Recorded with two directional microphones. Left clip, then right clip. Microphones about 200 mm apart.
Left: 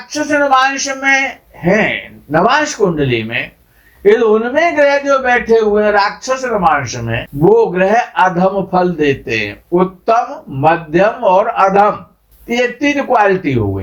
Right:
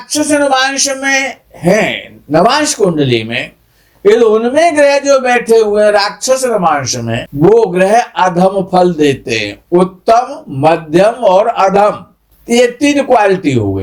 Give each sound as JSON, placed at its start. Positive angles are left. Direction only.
{"t": 0.1, "sound": "a man's voice", "side_deg": -35}